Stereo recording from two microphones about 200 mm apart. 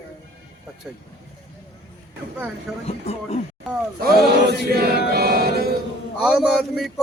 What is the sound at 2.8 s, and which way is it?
Speech, 30° left (ahead or behind).